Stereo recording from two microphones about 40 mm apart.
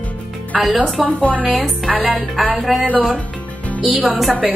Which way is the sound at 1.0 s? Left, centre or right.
Left.